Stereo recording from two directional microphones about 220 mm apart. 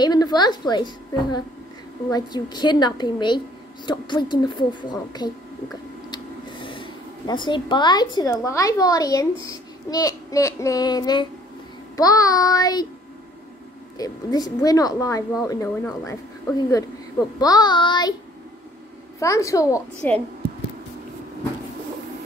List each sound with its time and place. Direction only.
0.0 s a woman's voice: 20° left (ahead or behind)
6.0 s a sound: 20° left (ahead or behind)
8.5 s a child's voice: 15° left (ahead or behind)
13.9 s a child's voice: 15° left (ahead or behind)
19.1 s a child's voice: 15° left (ahead or behind)